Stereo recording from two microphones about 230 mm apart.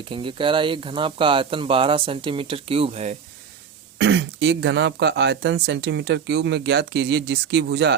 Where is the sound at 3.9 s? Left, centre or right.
Right.